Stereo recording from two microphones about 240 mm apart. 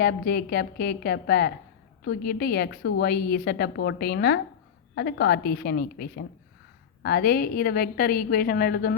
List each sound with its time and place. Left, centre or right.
0.0 s a woman's voice: left